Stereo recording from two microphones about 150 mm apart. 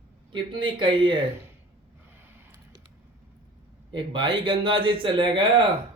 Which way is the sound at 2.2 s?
15° right (ahead or behind).